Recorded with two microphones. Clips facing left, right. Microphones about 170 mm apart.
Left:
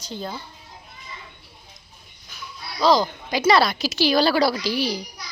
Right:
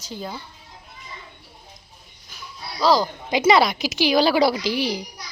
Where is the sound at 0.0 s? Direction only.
10° right (ahead or behind).